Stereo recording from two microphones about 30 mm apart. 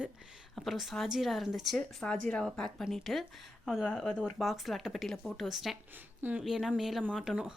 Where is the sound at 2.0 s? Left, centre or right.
Left.